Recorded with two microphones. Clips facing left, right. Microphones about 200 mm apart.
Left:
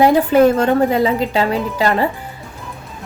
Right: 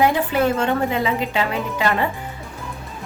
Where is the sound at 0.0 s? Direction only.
40° left (ahead or behind).